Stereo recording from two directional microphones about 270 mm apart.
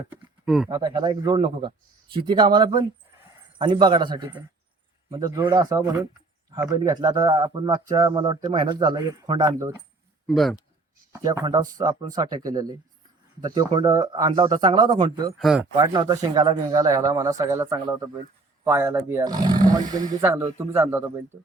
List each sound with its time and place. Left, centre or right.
0.0 s speech: centre
0.4 s speech: centre
0.7 s a man's voice: centre
10.2 s speech: centre
11.1 s a man's voice: centre
15.4 s speech: centre
15.7 s a man's voice: centre